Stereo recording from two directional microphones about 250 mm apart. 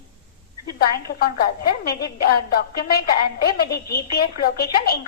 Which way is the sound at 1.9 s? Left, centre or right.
Left.